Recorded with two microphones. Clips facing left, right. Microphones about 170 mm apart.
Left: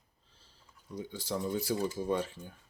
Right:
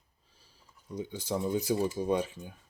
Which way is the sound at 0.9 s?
20° right (ahead or behind).